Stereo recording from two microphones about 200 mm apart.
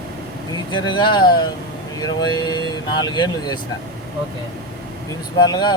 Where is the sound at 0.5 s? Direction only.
25° left (ahead or behind).